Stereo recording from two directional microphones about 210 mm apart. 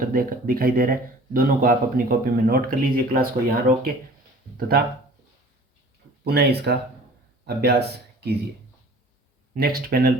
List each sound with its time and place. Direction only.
0.0 s speech: 45° right (ahead or behind)
6.2 s speech: 50° right (ahead or behind)
9.6 s speech: 45° right (ahead or behind)